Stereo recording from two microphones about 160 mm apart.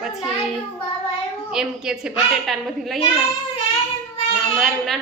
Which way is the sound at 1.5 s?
5° right (ahead or behind).